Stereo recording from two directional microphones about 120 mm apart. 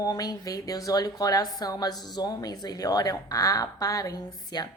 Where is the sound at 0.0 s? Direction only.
35° left (ahead or behind).